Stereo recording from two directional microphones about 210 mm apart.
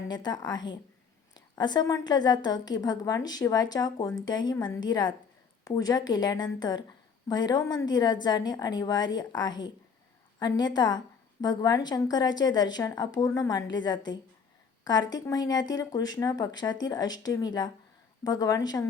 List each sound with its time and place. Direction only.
0.1 s a woman's voice: 20° left (ahead or behind)
10.8 s a woman's voice: 20° left (ahead or behind)